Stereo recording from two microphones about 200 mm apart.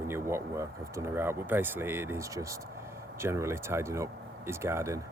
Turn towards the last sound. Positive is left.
turn(degrees=-15)  # may be behind; listen again after turning